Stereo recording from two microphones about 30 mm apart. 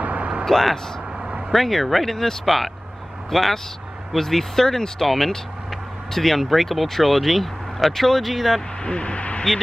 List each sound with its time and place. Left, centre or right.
0.0 s vehicle: right
0.5 s speech: centre
8.8 s speech: left